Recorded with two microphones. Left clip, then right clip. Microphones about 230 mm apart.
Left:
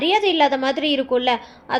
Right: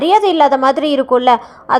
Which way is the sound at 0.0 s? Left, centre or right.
Right.